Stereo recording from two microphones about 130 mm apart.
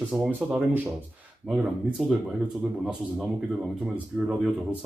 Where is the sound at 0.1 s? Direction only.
10° right (ahead or behind).